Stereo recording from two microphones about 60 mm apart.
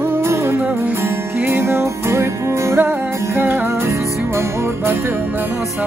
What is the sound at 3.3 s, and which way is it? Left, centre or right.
Music, right.